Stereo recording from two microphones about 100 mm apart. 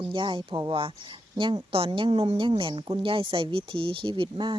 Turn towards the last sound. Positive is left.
turn(degrees=-55)  # may be behind; listen again after turning